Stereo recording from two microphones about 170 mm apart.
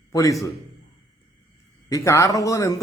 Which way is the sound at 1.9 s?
15° left (ahead or behind).